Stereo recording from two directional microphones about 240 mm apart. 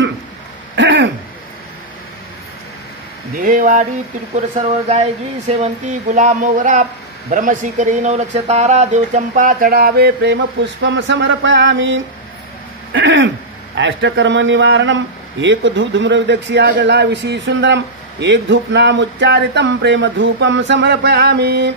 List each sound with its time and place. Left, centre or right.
0.7 s throat clearing: right
3.3 s speech: right